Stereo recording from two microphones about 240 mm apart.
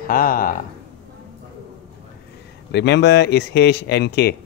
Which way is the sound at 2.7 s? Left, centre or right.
Left.